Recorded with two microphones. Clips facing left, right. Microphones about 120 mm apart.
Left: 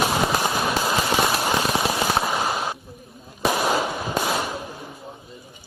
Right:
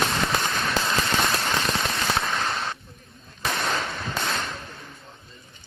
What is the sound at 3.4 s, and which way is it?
Firecracker, 10° left (ahead or behind).